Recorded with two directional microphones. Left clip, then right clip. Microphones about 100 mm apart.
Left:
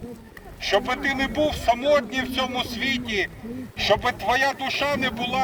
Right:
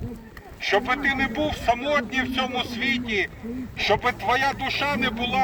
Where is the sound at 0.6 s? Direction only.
30° left (ahead or behind).